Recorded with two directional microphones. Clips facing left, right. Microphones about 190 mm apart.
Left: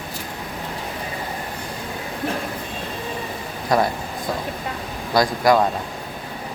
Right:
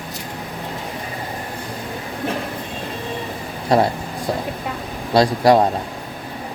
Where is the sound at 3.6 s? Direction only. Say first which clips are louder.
Right 3 dB; 30° right (ahead or behind).